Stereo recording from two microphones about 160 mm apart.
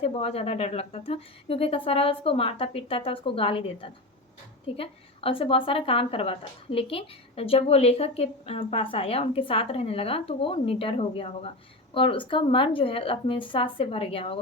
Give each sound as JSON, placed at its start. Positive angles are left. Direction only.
{"t": 0.0, "sound": "a woman's voice", "side_deg": 40}